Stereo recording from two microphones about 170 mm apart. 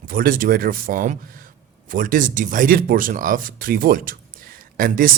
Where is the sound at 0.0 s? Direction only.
60° right (ahead or behind).